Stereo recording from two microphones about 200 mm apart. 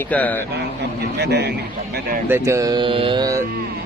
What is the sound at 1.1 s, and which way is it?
Speech, 55° right (ahead or behind).